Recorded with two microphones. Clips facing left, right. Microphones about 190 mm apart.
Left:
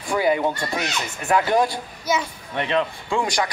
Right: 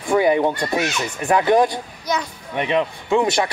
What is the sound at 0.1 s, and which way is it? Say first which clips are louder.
Speech: right 4 dB; 20° right (ahead or behind).